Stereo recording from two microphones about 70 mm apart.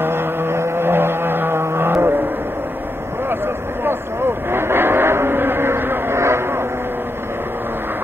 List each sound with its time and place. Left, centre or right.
0.0 s vehicle: right
4.5 s vehicle: right